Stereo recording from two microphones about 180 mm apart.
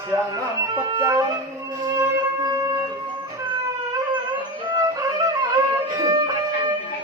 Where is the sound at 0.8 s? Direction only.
20° right (ahead or behind).